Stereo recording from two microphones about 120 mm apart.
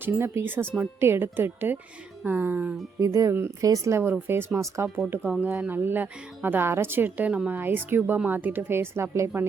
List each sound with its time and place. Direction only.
0.0 s speech: 20° right (ahead or behind)
3.0 s speech: 25° right (ahead or behind)
5.3 s speech: 15° right (ahead or behind)